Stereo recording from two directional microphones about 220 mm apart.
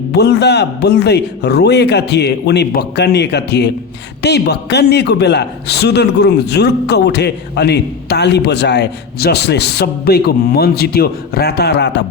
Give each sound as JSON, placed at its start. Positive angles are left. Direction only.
{"t": 0.1, "sound": "a man's voice", "side_deg": 50}